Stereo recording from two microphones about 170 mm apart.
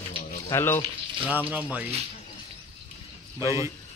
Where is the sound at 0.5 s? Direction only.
15° left (ahead or behind).